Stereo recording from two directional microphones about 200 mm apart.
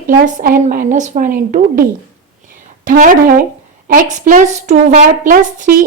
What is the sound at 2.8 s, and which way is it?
A woman's voice, 45° right (ahead or behind).